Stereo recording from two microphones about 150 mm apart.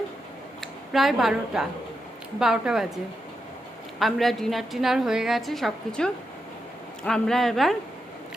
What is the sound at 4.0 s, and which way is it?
A woman's voice, centre (ahead or behind).